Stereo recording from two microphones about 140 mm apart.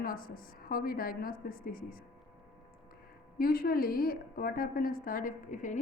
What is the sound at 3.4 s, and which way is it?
A woman's voice, 90° left.